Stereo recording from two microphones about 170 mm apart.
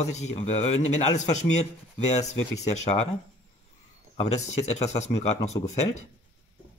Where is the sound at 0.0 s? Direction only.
40° left (ahead or behind).